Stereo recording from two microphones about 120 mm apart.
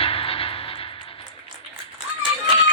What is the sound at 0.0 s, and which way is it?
Vehicle, 50° left (ahead or behind).